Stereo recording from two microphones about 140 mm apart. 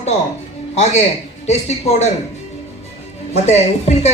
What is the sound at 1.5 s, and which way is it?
Speech, 50° left (ahead or behind).